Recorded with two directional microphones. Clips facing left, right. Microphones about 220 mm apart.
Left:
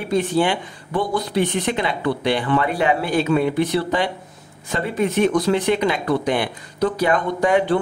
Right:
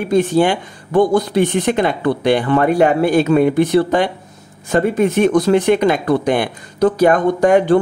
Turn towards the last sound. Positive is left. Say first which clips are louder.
# right 6 dB
turn(degrees=-45)  # may be behind; listen again after turning